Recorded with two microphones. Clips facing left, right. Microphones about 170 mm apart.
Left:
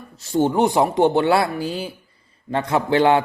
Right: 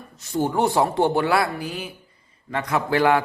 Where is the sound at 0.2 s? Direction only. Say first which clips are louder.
Left 4 dB; 25° left (ahead or behind).